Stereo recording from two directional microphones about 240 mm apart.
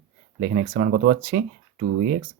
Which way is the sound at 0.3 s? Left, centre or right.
Right.